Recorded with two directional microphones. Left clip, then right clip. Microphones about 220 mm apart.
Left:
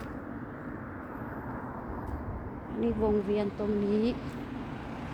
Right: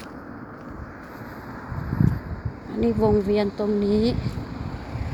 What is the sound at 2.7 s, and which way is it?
Speech, 30° right (ahead or behind).